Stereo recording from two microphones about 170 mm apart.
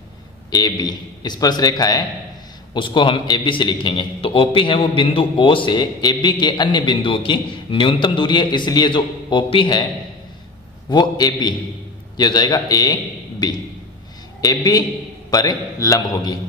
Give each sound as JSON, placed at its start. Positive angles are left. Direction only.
{"t": 0.5, "sound": "a man's voice", "side_deg": 20}
{"t": 10.9, "sound": "a man's voice", "side_deg": 25}